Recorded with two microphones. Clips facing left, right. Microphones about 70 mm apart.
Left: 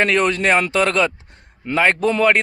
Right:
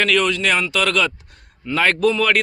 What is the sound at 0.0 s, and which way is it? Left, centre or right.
A man's voice, left.